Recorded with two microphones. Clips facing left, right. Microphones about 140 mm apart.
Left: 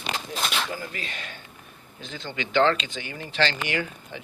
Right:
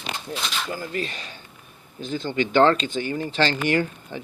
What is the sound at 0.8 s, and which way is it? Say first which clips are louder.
Speech: right 6 dB; 40° right (ahead or behind).